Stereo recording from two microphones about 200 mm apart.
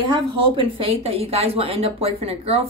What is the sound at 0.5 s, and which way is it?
Speech, 25° right (ahead or behind).